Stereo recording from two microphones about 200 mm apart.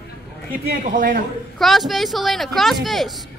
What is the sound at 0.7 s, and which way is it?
Speech, 45° right (ahead or behind).